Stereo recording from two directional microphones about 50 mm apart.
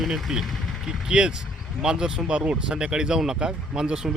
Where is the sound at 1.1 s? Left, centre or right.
Centre.